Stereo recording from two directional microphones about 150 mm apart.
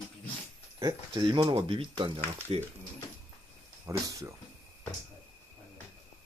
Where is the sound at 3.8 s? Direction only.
20° right (ahead or behind).